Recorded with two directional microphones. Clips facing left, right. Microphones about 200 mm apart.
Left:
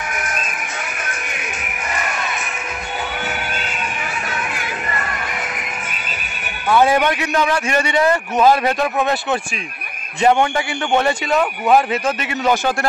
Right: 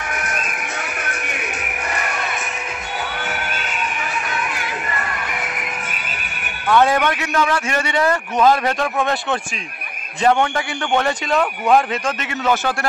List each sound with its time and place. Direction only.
6.7 s a man's voice: 10° left (ahead or behind)